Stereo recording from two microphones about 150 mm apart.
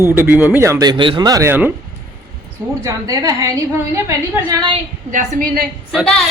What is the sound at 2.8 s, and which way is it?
Speech, 20° right (ahead or behind).